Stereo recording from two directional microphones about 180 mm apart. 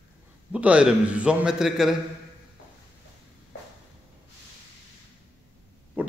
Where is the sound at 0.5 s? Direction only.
5° right (ahead or behind).